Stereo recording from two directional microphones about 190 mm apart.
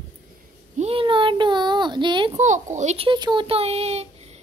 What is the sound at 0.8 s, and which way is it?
Speech, 30° right (ahead or behind).